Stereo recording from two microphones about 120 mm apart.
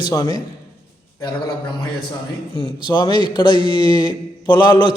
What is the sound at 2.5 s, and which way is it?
A man's voice, 40° left (ahead or behind).